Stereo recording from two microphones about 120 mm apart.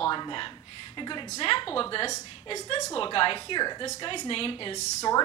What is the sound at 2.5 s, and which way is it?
A woman's voice, 35° left (ahead or behind).